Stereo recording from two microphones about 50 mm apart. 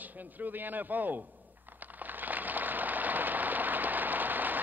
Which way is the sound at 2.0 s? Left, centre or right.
Right.